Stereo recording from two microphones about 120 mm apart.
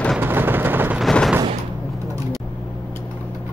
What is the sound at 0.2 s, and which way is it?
Vehicle, 20° right (ahead or behind).